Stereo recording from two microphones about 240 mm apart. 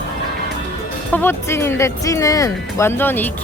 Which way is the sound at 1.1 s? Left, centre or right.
Centre.